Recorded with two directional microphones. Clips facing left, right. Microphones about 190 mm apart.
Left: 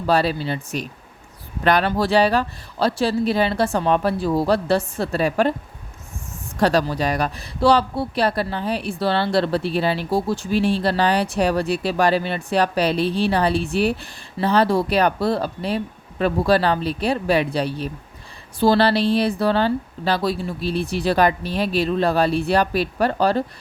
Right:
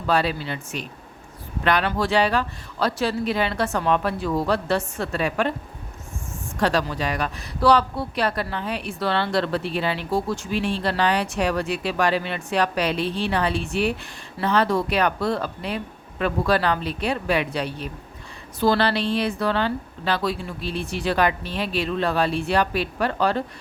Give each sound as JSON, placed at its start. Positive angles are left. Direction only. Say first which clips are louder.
{"t": 0.1, "sound": "a woman's voice", "louder": "left 3 dB", "side_deg": 35}
{"t": 6.6, "sound": "a woman's voice", "louder": "left 4 dB", "side_deg": 40}